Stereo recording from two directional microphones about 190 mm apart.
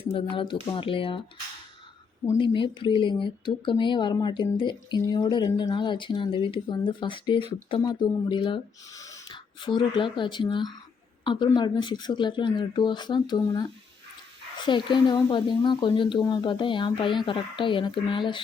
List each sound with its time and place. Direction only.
0.1 s a woman's voice: 30° left (ahead or behind)
2.4 s a woman's voice: 25° left (ahead or behind)